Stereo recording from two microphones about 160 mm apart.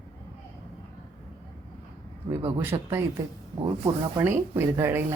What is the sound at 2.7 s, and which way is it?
Speech, 25° right (ahead or behind).